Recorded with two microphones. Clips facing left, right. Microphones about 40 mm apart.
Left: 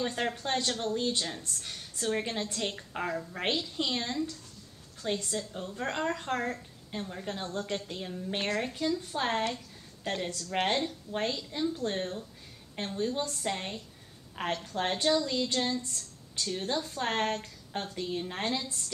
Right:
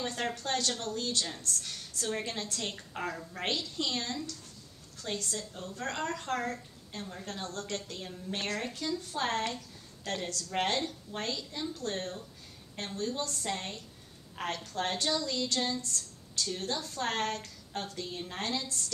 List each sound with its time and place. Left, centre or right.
0.0 s a woman's voice: centre